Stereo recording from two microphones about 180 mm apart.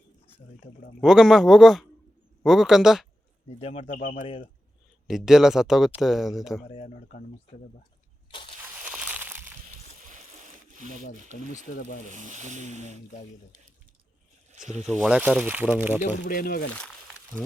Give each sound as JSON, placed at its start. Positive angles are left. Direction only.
{"t": 1.0, "sound": "speech", "side_deg": -5}
{"t": 3.6, "sound": "speech", "side_deg": 30}
{"t": 3.9, "sound": "speech", "side_deg": 50}
{"t": 5.0, "sound": "speech", "side_deg": -5}
{"t": 6.8, "sound": "speech", "side_deg": 45}
{"t": 8.3, "sound": "a sound", "side_deg": 30}
{"t": 8.6, "sound": "a sound", "side_deg": -10}
{"t": 9.6, "sound": "a sound", "side_deg": -45}
{"t": 11.2, "sound": "speech", "side_deg": -45}
{"t": 14.8, "sound": "speech", "side_deg": 0}
{"t": 16.2, "sound": "speech", "side_deg": 55}